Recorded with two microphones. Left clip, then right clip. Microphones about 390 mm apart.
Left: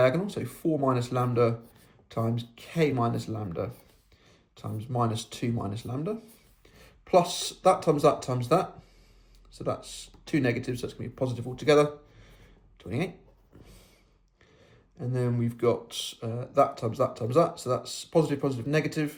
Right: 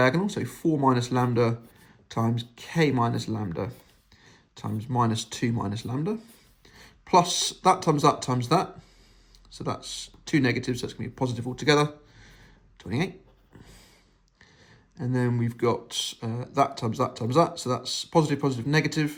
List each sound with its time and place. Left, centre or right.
0.0 s speech: centre
14.9 s speech: centre